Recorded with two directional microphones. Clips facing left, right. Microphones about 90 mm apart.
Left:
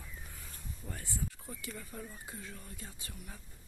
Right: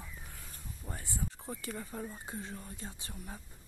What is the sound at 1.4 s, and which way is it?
Speech, 35° right (ahead or behind).